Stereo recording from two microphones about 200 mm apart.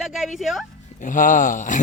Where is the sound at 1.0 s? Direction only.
40° left (ahead or behind).